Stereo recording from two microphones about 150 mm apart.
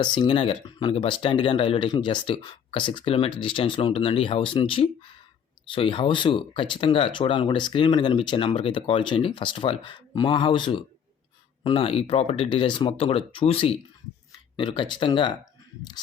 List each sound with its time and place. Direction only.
0.0 s speech: 30° left (ahead or behind)